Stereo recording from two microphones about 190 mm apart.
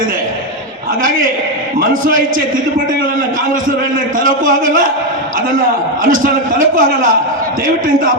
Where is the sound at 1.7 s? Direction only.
50° right (ahead or behind).